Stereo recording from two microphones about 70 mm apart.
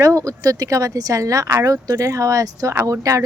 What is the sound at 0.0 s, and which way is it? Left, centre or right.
Speech, right.